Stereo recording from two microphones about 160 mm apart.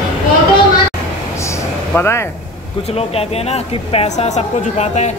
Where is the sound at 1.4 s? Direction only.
20° left (ahead or behind).